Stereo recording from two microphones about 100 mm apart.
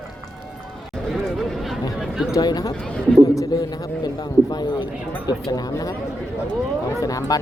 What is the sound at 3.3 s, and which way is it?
A man's voice, 40° left (ahead or behind).